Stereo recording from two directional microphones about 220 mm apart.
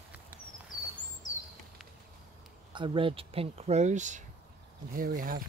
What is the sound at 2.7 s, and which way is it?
Speech, 20° right (ahead or behind).